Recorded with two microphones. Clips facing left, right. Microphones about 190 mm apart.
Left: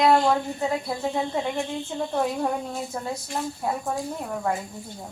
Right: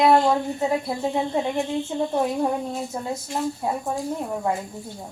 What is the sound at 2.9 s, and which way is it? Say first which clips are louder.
Speech: right 1 dB; 20° right (ahead or behind).